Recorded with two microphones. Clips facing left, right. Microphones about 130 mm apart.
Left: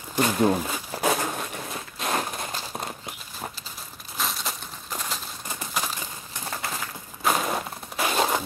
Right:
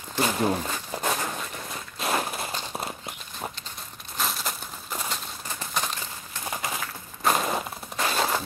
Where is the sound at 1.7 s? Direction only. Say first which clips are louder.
Right 2 dB; centre (ahead or behind).